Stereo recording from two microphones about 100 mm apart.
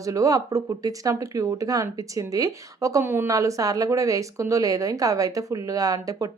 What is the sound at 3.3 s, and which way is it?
Speech, 35° right (ahead or behind).